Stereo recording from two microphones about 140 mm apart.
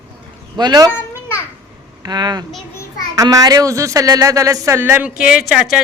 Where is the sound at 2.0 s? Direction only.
30° right (ahead or behind).